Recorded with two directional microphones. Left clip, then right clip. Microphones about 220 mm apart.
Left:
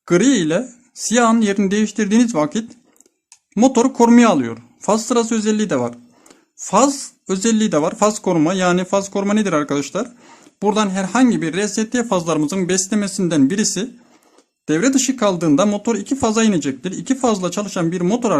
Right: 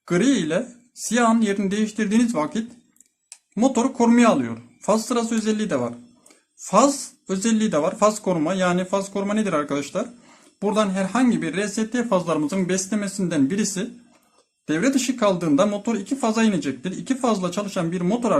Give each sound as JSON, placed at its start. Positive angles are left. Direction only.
{"t": 0.0, "sound": "speech", "side_deg": 45}